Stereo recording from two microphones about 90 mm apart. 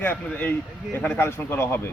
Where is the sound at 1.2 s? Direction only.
30° left (ahead or behind).